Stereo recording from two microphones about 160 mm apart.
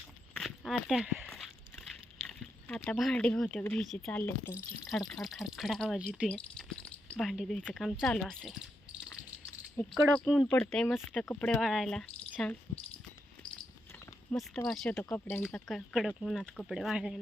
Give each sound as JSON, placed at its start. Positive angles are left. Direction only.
{"t": 0.3, "sound": "a sound", "side_deg": 0}
{"t": 2.2, "sound": "speech", "side_deg": 5}
{"t": 4.5, "sound": "speech", "side_deg": 0}
{"t": 9.8, "sound": "speech", "side_deg": 15}
{"t": 14.3, "sound": "speech", "side_deg": 5}
{"t": 15.4, "sound": "speech", "side_deg": 0}